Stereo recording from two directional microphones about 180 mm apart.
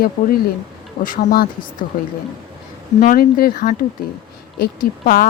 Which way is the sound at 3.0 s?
50° left (ahead or behind).